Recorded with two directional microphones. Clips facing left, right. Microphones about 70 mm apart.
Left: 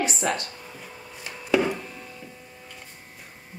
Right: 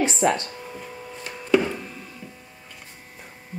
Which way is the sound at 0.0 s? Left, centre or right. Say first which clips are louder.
Right 5 dB; right.